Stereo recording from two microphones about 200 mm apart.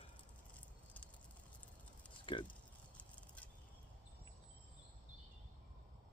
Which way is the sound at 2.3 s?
25° left (ahead or behind).